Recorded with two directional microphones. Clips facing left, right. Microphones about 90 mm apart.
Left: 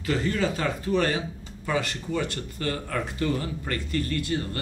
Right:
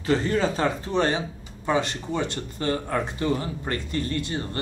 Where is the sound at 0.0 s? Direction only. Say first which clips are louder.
Right 3 dB; 30° right (ahead or behind).